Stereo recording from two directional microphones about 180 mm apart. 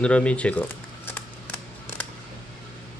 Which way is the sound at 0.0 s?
5° left (ahead or behind).